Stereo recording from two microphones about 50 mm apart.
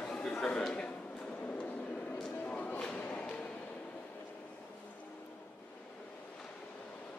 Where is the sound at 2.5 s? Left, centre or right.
Left.